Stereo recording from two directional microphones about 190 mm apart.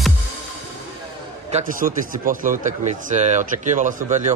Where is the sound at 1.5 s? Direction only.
45° right (ahead or behind).